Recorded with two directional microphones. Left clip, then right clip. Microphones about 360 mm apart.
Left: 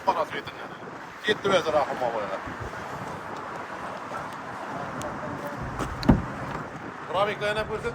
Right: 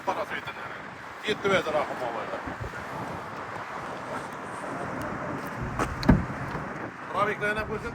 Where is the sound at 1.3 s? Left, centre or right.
Centre.